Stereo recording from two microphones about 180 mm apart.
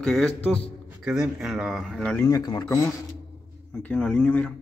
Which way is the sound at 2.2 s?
20° left (ahead or behind).